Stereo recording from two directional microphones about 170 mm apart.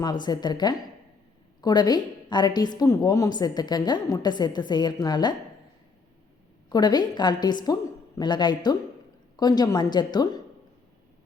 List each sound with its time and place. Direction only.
0.0 s a woman's voice: 25° left (ahead or behind)
6.7 s a woman's voice: 25° left (ahead or behind)